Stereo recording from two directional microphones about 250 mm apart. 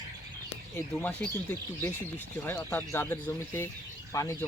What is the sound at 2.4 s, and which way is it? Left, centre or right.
Speech, centre.